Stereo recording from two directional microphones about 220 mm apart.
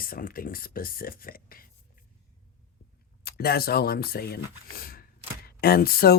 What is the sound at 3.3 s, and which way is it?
Speech, 45° left (ahead or behind).